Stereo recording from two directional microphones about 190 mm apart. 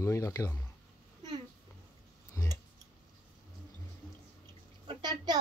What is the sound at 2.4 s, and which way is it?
Tick-tock, 15° left (ahead or behind).